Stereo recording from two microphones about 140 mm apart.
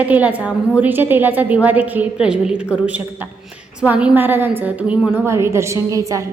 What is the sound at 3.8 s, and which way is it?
A woman's voice, 10° right (ahead or behind).